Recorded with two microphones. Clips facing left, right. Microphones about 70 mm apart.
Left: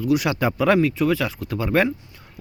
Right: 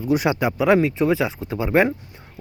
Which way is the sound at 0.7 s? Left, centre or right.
Right.